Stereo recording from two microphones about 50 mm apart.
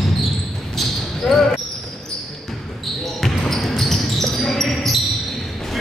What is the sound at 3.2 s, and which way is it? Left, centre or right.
Basketball bounce, centre.